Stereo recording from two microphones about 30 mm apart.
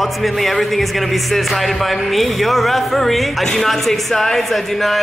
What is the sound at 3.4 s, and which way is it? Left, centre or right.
Speech, centre.